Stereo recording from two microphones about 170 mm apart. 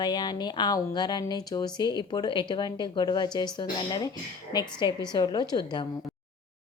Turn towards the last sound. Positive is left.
turn(degrees=25)  # may be behind; listen again after turning